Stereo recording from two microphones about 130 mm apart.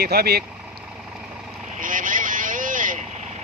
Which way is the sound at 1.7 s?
90° right.